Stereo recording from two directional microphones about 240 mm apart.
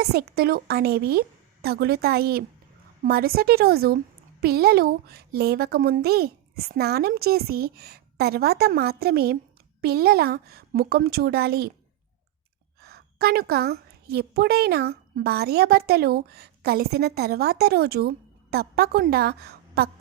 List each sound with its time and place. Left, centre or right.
0.0 s a woman's voice: right
12.8 s a woman's voice: right